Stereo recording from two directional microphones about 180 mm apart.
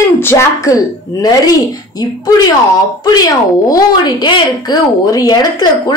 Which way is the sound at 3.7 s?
25° left (ahead or behind).